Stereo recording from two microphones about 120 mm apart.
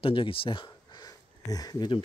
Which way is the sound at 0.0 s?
45° left (ahead or behind).